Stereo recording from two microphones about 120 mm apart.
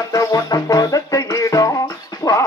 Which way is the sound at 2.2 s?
25° left (ahead or behind).